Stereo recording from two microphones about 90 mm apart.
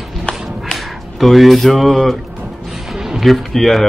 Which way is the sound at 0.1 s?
5° left (ahead or behind).